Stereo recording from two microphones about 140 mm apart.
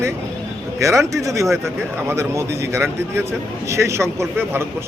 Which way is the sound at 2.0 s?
20° right (ahead or behind).